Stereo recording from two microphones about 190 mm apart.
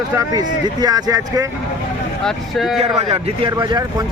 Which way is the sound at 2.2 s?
Centre (ahead or behind).